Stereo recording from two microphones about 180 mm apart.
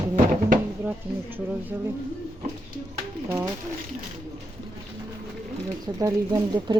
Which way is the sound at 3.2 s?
20° right (ahead or behind).